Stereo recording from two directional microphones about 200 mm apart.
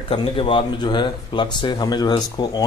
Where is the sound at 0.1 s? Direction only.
25° left (ahead or behind).